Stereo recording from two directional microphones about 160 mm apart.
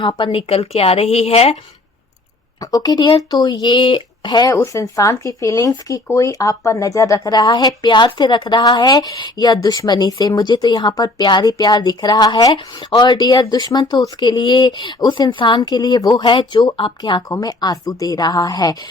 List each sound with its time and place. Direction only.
0.0 s speech: 30° left (ahead or behind)
2.6 s speech: 25° left (ahead or behind)